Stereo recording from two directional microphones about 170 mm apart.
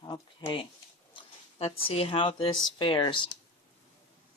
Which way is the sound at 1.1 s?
35° left (ahead or behind).